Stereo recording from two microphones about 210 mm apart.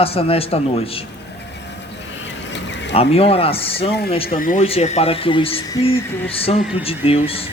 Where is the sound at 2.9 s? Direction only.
25° left (ahead or behind).